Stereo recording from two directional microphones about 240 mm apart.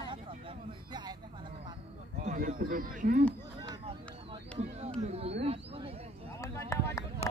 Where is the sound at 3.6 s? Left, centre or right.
Centre.